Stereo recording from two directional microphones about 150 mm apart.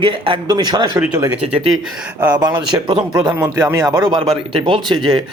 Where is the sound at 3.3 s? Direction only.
15° right (ahead or behind); by 5.0 s 35° right (ahead or behind).